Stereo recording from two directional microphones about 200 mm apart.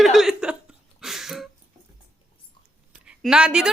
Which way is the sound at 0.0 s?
Centre (ahead or behind).